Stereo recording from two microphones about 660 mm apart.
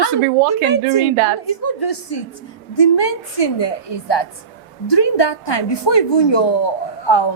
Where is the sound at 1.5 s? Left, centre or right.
Left.